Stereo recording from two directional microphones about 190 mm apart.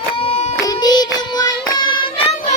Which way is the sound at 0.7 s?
20° left (ahead or behind).